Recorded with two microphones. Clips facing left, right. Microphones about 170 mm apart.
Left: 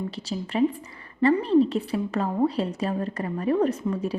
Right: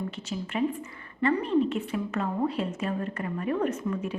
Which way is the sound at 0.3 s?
35° left (ahead or behind).